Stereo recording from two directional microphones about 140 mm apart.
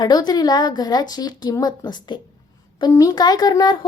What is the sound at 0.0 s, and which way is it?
A woman's voice, 30° left (ahead or behind).